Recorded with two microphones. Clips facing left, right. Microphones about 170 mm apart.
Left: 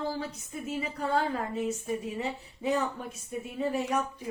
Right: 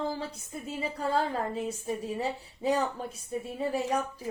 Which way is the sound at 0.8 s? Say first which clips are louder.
Right 1 dB; 30° right (ahead or behind).